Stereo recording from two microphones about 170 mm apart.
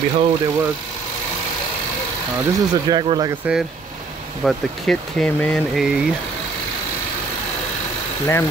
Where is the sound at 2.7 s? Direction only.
25° right (ahead or behind).